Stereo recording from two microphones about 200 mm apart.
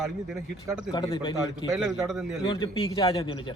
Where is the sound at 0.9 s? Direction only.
25° left (ahead or behind).